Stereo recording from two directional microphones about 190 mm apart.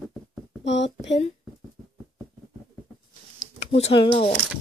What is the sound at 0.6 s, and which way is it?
Speech, 70° left (ahead or behind).